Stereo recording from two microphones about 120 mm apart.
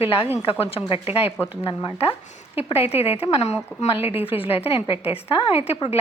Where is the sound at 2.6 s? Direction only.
55° left (ahead or behind).